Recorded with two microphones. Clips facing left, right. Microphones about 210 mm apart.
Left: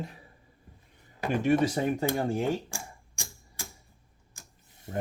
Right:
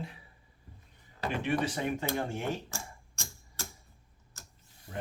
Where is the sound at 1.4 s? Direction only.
40° left (ahead or behind).